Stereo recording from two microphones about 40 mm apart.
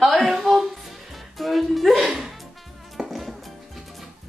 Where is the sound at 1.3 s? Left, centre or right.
Centre.